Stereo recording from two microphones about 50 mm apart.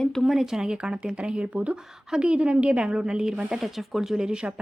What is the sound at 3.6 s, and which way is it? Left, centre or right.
Speech, centre.